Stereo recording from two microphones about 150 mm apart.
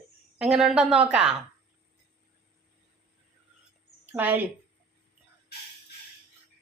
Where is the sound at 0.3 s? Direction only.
5° right (ahead or behind).